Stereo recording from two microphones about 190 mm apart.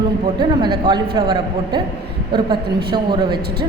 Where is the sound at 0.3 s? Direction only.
25° right (ahead or behind).